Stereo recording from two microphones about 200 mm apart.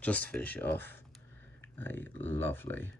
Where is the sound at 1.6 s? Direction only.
10° left (ahead or behind).